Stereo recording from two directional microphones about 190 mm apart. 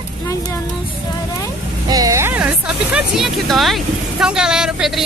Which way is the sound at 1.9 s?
20° right (ahead or behind).